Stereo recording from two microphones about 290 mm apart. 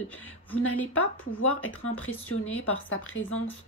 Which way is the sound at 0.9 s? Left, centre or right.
Left.